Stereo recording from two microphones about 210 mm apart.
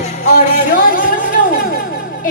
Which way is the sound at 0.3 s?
40° left (ahead or behind).